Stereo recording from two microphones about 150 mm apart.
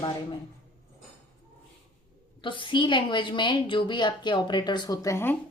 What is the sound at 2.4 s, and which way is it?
A woman's voice, 35° left (ahead or behind).